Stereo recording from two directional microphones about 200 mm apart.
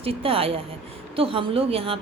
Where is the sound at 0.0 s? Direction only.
30° right (ahead or behind).